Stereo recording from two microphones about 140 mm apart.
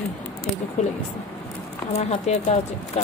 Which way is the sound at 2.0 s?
50° left (ahead or behind).